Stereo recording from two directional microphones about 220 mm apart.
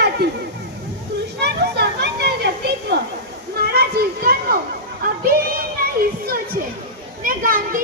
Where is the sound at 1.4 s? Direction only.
50° right (ahead or behind).